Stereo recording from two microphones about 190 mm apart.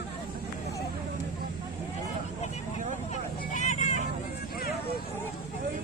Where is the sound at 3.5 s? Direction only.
40° left (ahead or behind).